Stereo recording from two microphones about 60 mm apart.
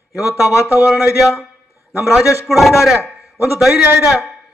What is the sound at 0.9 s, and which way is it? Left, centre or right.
Speech, centre.